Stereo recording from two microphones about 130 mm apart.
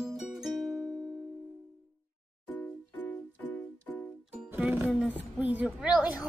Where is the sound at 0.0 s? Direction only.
Centre (ahead or behind).